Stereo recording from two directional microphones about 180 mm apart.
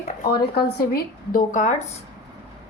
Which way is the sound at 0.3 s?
60° left (ahead or behind).